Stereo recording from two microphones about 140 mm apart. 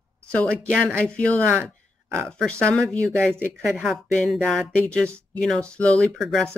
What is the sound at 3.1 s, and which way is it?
Speech, 15° right (ahead or behind).